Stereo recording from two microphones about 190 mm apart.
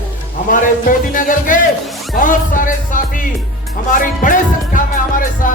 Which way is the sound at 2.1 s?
45° left (ahead or behind).